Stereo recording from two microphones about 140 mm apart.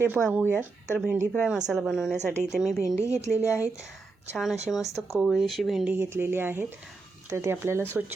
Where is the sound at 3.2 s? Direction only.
20° left (ahead or behind).